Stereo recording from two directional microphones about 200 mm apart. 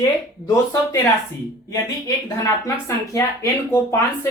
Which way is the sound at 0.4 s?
15° left (ahead or behind).